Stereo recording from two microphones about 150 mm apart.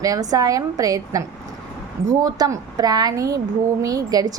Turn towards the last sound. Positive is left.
turn(degrees=-25)  # may be behind; listen again after turning